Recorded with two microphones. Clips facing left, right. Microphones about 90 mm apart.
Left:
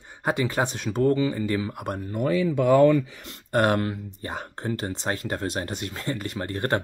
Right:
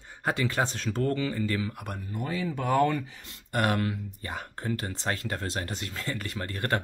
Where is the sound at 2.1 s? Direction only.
75° left (ahead or behind).